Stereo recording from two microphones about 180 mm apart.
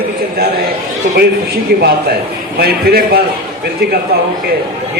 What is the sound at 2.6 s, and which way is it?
Speech, 60° right (ahead or behind).